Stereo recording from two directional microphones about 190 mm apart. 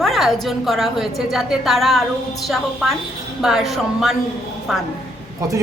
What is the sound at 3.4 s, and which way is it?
Speech, centre (ahead or behind).